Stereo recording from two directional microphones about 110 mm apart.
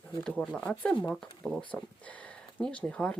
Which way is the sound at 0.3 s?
5° left (ahead or behind).